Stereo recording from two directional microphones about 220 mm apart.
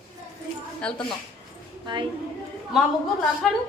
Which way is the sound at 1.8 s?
20° right (ahead or behind).